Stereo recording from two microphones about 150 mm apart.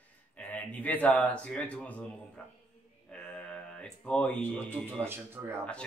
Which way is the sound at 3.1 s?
5° left (ahead or behind).